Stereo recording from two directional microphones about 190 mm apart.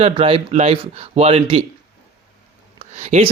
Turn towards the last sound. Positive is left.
turn(degrees=-35)  # may be behind; listen again after turning